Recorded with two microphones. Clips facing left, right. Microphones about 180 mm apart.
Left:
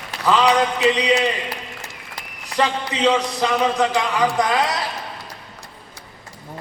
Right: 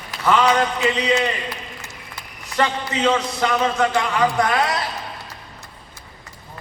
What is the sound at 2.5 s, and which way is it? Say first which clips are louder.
A man's voice: even; 15° left (ahead or behind).